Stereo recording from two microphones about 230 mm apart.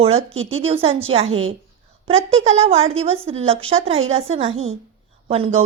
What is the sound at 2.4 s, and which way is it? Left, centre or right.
A woman's voice, right.